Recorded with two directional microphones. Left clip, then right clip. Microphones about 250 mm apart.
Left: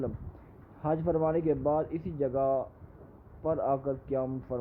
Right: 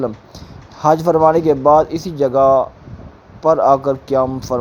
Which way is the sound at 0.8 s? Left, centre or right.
Centre.